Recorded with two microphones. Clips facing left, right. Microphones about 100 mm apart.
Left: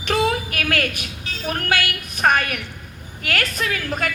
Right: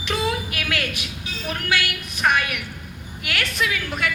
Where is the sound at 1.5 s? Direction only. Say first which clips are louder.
Left 2 dB; 45° left (ahead or behind).